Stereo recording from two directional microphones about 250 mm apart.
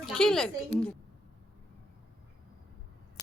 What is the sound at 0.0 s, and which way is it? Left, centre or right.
Speech, centre.